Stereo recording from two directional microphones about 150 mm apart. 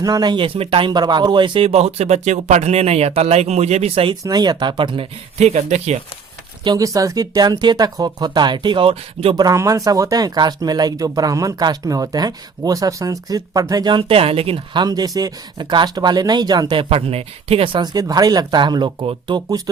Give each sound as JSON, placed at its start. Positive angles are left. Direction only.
{"t": 0.0, "sound": "speech", "side_deg": -25}
{"t": 4.2, "sound": "speech", "side_deg": -25}
{"t": 6.7, "sound": "speech", "side_deg": -20}
{"t": 9.3, "sound": "speech", "side_deg": -25}